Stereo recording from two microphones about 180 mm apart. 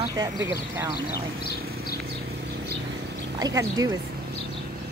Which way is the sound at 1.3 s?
60° left (ahead or behind).